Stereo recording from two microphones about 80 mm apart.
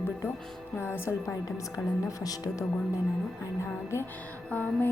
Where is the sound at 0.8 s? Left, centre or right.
Left.